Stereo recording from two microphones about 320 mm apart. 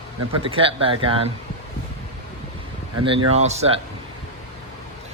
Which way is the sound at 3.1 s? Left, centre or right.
Centre.